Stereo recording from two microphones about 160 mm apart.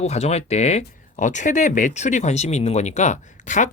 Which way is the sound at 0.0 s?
40° left (ahead or behind).